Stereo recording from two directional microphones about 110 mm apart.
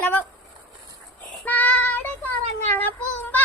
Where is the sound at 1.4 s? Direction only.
15° left (ahead or behind).